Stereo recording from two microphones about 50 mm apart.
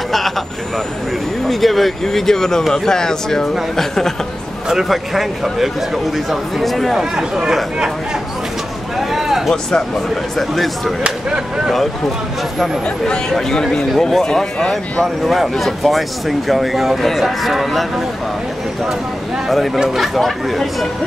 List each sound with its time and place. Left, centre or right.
1.5 s speech: centre
4.6 s speech: centre
8.9 s a sound: centre
9.5 s speech: centre
11.1 s speech: centre
13.0 s speech: centre
15.2 s speech: centre
19.5 s speech: centre